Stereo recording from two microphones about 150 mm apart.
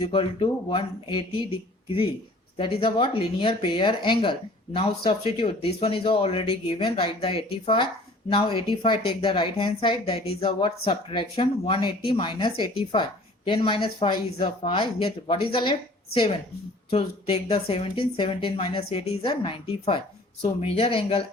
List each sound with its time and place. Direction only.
0.0 s speech: 35° left (ahead or behind)